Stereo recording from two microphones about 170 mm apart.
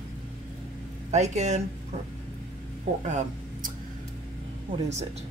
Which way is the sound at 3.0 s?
45° right (ahead or behind).